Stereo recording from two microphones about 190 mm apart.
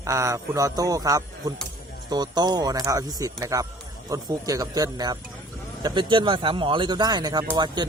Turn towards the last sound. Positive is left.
turn(degrees=-20)  # may be behind; listen again after turning